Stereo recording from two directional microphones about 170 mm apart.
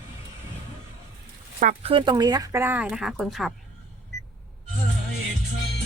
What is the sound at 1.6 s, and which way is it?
Speech, 45° right (ahead or behind).